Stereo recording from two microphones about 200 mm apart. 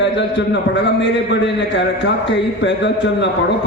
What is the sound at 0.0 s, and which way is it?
A man's voice, 60° left (ahead or behind).